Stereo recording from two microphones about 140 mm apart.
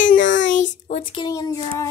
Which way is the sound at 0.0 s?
70° left (ahead or behind).